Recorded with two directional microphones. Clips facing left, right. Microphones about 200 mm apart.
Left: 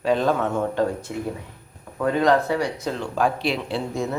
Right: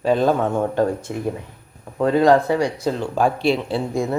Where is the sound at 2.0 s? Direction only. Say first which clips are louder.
Right 4 dB; 30° right (ahead or behind).